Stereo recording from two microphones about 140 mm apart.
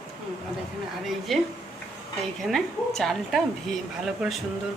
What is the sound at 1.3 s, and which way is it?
A woman's voice, centre (ahead or behind).